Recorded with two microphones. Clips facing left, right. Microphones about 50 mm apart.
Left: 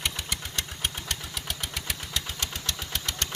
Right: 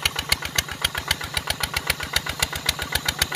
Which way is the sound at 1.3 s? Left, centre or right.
Right.